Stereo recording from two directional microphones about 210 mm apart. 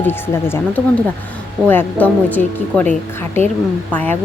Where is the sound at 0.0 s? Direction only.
10° left (ahead or behind).